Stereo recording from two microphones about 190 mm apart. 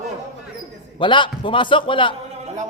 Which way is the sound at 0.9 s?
25° left (ahead or behind).